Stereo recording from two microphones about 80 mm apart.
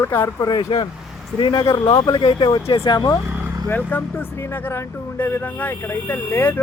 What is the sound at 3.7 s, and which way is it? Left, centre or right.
Speech, left.